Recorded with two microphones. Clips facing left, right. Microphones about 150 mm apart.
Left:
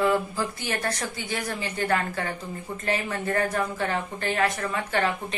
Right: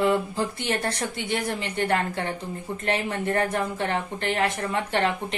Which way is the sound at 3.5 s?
25° right (ahead or behind).